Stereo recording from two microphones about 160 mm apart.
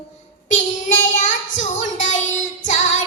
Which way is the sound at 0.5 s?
50° left (ahead or behind).